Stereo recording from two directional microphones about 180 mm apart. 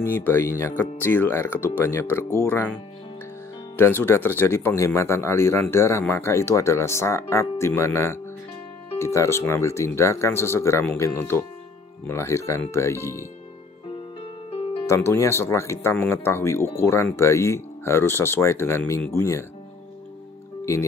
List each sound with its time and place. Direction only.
0.0 s speech: 10° left (ahead or behind)
3.7 s speech: 15° left (ahead or behind)
14.2 s music: 30° left (ahead or behind)
14.9 s speech: 15° left (ahead or behind)